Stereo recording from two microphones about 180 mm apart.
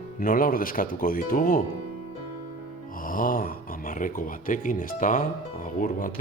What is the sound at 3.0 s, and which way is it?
Speech, 50° left (ahead or behind).